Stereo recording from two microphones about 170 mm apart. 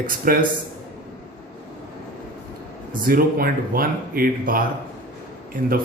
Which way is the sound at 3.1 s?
60° right (ahead or behind).